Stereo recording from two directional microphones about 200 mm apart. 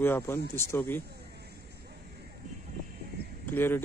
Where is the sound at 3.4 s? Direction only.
10° left (ahead or behind).